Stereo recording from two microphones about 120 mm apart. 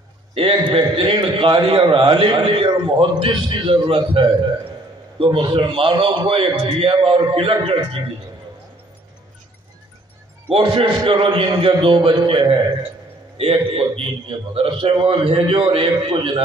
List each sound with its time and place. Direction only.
0.3 s a man's voice: 50° right (ahead or behind)
10.5 s a man's voice: 45° right (ahead or behind)